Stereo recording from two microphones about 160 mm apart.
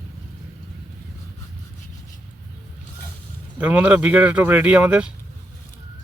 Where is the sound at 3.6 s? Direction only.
10° right (ahead or behind).